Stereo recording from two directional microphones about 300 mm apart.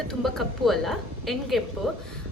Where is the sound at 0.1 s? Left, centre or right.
Centre.